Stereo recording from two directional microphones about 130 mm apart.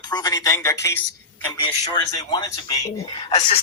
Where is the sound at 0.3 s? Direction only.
25° left (ahead or behind).